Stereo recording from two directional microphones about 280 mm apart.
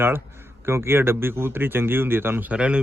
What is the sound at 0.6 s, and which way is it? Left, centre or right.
A man's voice, centre.